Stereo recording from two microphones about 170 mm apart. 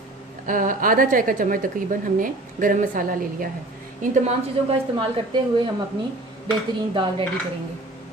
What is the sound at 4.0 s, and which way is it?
Speech, 40° right (ahead or behind).